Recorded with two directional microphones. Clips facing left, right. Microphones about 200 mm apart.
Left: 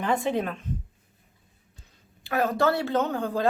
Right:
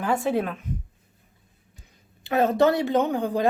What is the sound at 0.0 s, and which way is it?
Speech, 5° right (ahead or behind).